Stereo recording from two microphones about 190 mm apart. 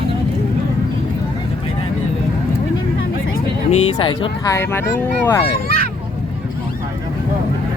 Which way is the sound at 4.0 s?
20° left (ahead or behind).